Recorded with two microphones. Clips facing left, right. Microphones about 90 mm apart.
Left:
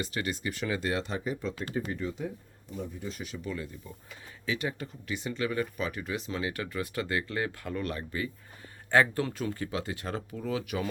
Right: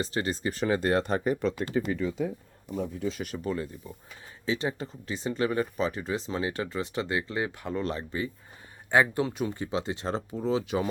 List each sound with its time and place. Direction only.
0.0 s speech: 30° right (ahead or behind); by 2.0 s 80° right
2.7 s speech: 5° right (ahead or behind)
3.2 s speech: 40° right (ahead or behind)